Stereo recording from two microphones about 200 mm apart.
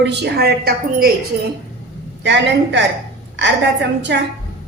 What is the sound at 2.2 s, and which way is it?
A woman's voice, 60° right (ahead or behind).